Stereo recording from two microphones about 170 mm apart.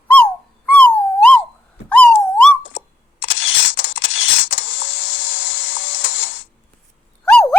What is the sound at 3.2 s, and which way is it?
Camera, 90° left.